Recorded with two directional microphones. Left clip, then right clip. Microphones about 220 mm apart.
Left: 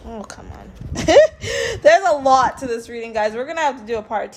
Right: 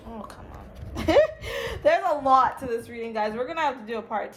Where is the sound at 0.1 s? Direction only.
40° left (ahead or behind).